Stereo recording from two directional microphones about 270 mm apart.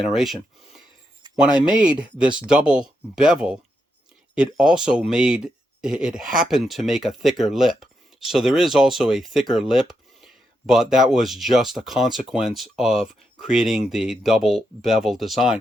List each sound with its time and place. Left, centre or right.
0.0 s speech: centre
1.4 s speech: centre